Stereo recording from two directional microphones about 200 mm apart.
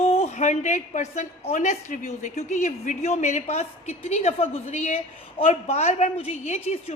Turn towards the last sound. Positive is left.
turn(degrees=30)  # may be behind; listen again after turning